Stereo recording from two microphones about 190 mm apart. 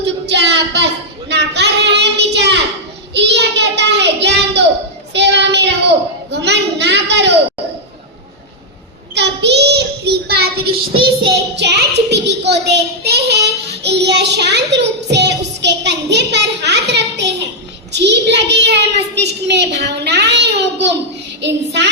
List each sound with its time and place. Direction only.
0.0 s child singing: 65° right (ahead or behind)
6.3 s a sound: 65° right (ahead or behind)
9.1 s child singing: 65° right (ahead or behind)
17.9 s a child's voice: 65° right (ahead or behind)